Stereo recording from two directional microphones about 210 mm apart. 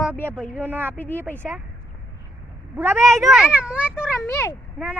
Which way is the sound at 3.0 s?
Centre (ahead or behind).